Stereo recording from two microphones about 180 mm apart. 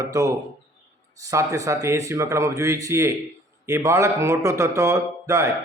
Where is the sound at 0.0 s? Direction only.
20° right (ahead or behind).